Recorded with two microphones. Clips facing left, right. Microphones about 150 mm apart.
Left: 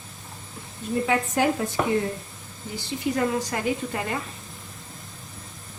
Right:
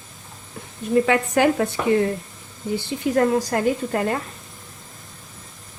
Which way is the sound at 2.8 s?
55° right (ahead or behind).